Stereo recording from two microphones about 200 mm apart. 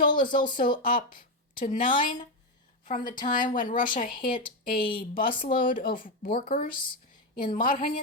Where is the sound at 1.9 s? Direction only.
25° left (ahead or behind).